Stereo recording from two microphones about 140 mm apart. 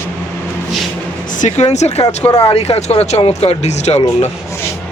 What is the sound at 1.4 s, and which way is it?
Speech, 55° left (ahead or behind).